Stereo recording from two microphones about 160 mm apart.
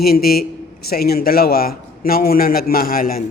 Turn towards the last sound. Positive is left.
turn(degrees=65)  # may be behind; listen again after turning